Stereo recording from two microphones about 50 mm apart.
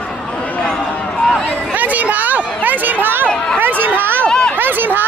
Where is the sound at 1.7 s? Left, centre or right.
Right.